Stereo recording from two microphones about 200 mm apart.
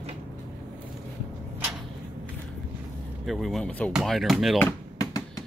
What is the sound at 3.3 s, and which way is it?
Speech, centre (ahead or behind).